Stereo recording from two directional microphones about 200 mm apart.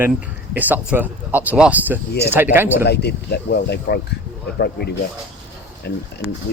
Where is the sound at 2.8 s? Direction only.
55° left (ahead or behind).